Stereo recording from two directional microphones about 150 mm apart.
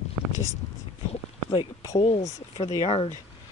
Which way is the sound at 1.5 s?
30° left (ahead or behind).